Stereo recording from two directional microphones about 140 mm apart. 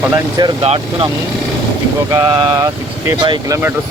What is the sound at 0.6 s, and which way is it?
Speech, 40° right (ahead or behind).